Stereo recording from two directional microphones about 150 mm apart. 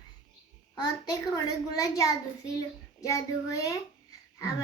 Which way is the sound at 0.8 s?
25° left (ahead or behind).